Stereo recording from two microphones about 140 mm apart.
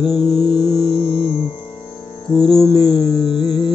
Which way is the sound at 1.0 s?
40° left (ahead or behind).